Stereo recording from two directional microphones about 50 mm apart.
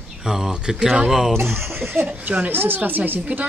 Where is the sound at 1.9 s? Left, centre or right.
Right.